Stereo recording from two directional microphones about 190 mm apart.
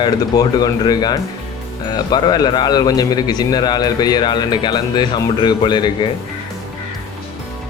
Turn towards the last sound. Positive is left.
turn(degrees=25)  # may be behind; listen again after turning